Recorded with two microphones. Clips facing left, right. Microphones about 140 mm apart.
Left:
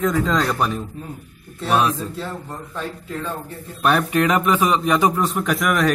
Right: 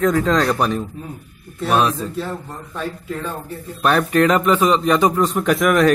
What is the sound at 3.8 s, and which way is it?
A man's voice, 10° left (ahead or behind).